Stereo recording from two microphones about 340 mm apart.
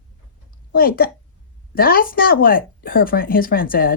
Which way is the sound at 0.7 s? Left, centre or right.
Left.